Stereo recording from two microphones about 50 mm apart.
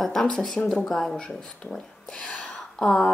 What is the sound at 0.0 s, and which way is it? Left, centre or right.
Speech, centre.